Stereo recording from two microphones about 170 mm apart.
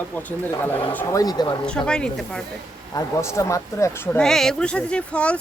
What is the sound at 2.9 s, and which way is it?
Speech, 15° left (ahead or behind).